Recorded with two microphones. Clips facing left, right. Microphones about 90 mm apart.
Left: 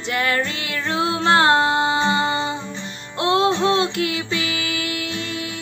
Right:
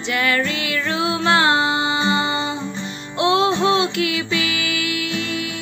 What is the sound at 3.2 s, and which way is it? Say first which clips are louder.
Music: right 1 dB; 40° left (ahead or behind).